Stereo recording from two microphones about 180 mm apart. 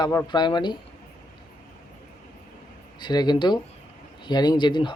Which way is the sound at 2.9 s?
25° left (ahead or behind).